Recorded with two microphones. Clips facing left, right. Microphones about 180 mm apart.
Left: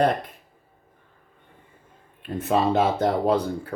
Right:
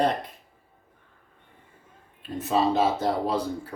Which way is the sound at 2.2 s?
55° left (ahead or behind).